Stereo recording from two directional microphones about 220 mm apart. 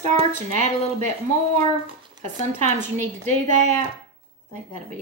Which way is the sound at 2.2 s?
35° right (ahead or behind).